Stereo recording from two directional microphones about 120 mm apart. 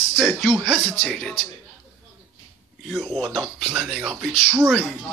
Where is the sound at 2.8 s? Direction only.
Centre (ahead or behind).